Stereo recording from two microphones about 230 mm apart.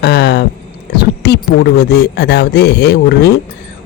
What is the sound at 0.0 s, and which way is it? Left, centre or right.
Speech, left.